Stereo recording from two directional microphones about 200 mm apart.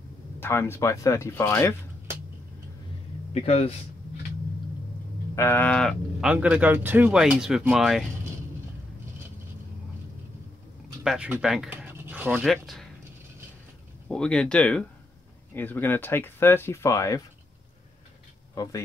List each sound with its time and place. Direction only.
0.4 s speech: 10° left (ahead or behind)
3.4 s speech: 30° left (ahead or behind)
5.3 s speech: 10° left (ahead or behind)
6.3 s speech: 5° right (ahead or behind)
11.1 s speech: 5° right (ahead or behind)
14.0 s speech: 5° left (ahead or behind)
18.5 s speech: 20° left (ahead or behind)